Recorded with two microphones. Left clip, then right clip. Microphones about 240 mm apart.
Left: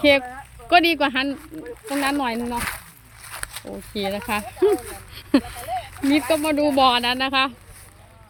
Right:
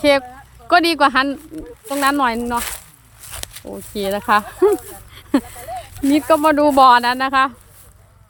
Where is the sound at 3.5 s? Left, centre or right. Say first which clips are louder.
Right 2 dB; centre.